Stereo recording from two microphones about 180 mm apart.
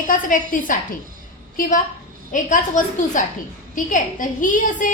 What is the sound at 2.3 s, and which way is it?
A woman's voice, 45° left (ahead or behind).